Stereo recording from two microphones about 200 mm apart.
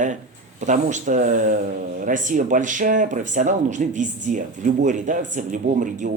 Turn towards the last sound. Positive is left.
turn(degrees=-40)  # may be behind; listen again after turning